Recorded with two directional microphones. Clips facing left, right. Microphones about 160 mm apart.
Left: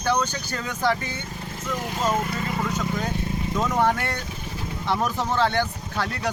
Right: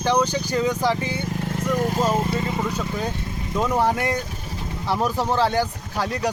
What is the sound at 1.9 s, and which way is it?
Speech, 35° right (ahead or behind).